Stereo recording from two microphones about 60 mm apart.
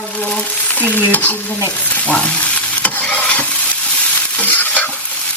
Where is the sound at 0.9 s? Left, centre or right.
Left.